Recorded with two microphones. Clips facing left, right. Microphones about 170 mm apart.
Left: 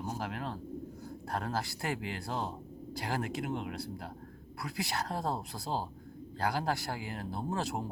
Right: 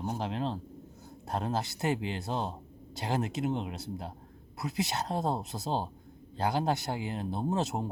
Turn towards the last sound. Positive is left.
turn(degrees=-20)  # may be behind; listen again after turning